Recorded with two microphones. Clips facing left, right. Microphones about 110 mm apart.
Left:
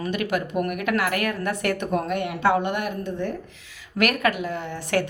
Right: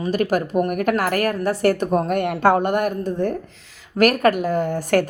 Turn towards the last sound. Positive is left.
turn(degrees=-45)  # may be behind; listen again after turning